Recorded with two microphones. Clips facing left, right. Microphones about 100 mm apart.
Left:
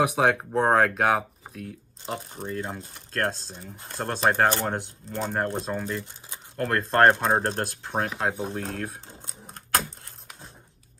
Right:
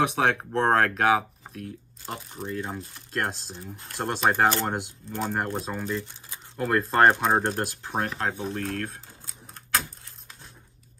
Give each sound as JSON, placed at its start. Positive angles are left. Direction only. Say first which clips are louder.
{"t": 0.0, "sound": "speech", "louder": "left 2 dB", "side_deg": 5}
{"t": 3.5, "sound": "speech", "louder": "even", "side_deg": 20}
{"t": 4.0, "sound": "speech", "louder": "even", "side_deg": -5}
{"t": 8.3, "sound": "speech", "louder": "even", "side_deg": 15}